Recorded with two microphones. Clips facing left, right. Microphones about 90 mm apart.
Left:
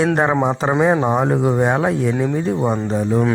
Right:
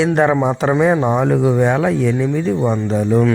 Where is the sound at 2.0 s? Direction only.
35° left (ahead or behind).